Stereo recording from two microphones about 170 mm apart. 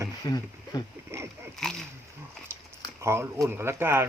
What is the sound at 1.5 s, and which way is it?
Speech, 5° left (ahead or behind).